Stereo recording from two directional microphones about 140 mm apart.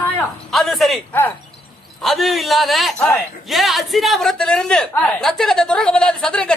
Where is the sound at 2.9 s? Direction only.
15° left (ahead or behind).